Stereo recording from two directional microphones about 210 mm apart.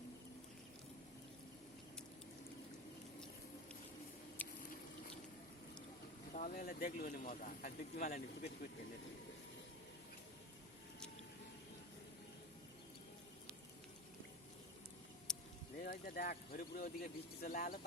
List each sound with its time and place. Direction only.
4.4 s a sound: 10° left (ahead or behind)
6.3 s speech: 40° left (ahead or behind)
15.3 s vehicle: 5° left (ahead or behind)
15.8 s speech: 45° left (ahead or behind)